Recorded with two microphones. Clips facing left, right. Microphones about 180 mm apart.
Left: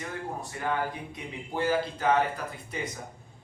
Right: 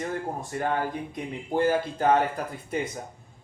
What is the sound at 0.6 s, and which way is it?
Speech, 45° right (ahead or behind).